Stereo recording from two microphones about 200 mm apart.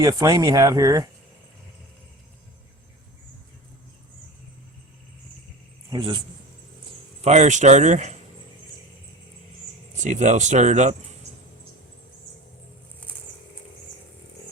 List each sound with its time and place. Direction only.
0.0 s speech: 15° right (ahead or behind)
5.9 s a man's voice: 25° right (ahead or behind)
7.2 s speech: 35° right (ahead or behind)
10.0 s speech: 35° right (ahead or behind)